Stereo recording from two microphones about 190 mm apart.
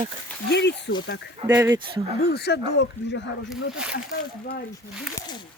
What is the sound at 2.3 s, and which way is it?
Speech, 60° left (ahead or behind).